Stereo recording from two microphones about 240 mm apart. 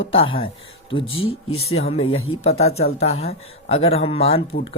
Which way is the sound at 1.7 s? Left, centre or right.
Left.